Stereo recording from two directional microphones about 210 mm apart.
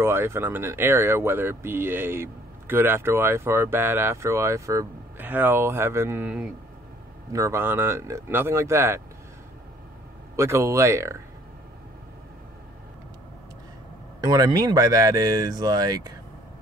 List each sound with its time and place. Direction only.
0.0 s speech: 10° right (ahead or behind)
10.3 s speech: 10° right (ahead or behind)
14.2 s speech: 15° right (ahead or behind)